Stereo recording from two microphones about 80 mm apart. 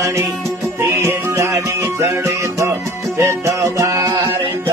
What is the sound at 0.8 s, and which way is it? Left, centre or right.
Music, right.